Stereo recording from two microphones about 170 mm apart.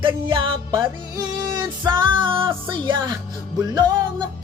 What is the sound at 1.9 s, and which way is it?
Music, 30° right (ahead or behind).